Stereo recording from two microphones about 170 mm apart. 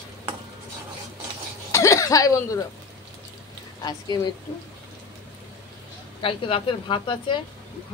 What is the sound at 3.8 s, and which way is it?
Speech, 25° left (ahead or behind).